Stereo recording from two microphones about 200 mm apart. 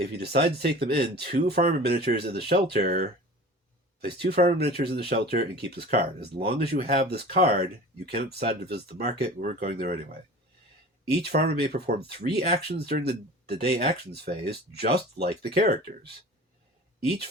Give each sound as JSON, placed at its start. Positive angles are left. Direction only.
{"t": 0.0, "sound": "speech", "side_deg": -55}
{"t": 11.1, "sound": "speech", "side_deg": -55}